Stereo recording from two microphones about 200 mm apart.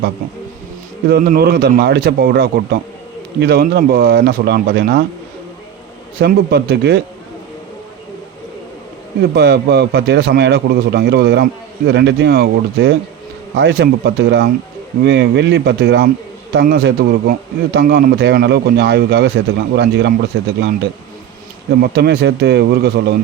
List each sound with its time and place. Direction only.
1.1 s a man's voice: 50° right (ahead or behind)
6.1 s speech: 50° right (ahead or behind)
9.3 s speech: 55° right (ahead or behind)
21.7 s speech: 55° right (ahead or behind)